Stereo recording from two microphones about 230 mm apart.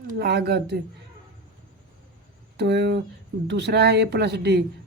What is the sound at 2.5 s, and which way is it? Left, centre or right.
A woman's voice, right.